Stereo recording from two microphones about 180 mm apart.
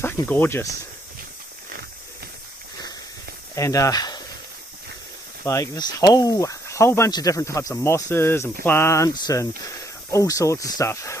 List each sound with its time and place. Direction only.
0.0 s speech: 10° left (ahead or behind)
3.5 s speech: 20° left (ahead or behind)
5.5 s speech: 20° left (ahead or behind)